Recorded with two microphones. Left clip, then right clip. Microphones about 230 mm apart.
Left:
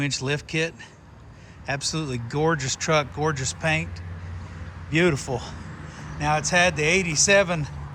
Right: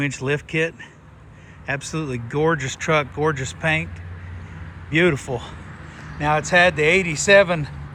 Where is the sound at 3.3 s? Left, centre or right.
Centre.